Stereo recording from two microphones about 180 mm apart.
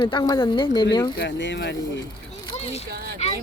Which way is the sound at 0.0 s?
25° left (ahead or behind).